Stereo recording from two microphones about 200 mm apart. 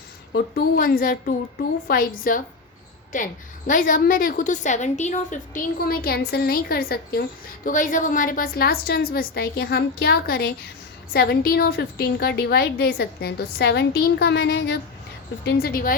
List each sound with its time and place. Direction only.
0.3 s a woman's voice: 50° left (ahead or behind)
3.7 s a woman's voice: 40° left (ahead or behind)